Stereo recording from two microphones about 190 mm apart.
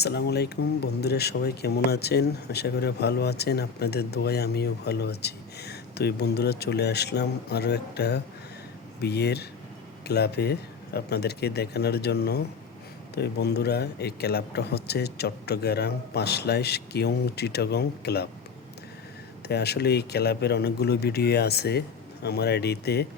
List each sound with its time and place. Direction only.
0.0 s speech: 60° left (ahead or behind)
19.5 s speech: 60° left (ahead or behind)